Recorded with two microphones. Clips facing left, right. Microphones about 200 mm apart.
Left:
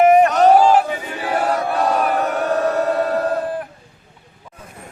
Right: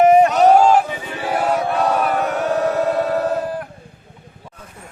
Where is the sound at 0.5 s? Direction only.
5° left (ahead or behind).